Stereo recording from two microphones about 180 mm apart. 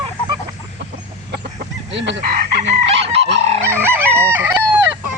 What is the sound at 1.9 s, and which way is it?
Fowl, 85° right.